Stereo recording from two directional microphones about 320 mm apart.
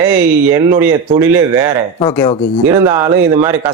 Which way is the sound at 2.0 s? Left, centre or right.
Centre.